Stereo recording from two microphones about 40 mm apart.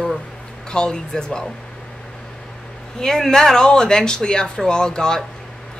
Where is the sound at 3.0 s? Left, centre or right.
Centre.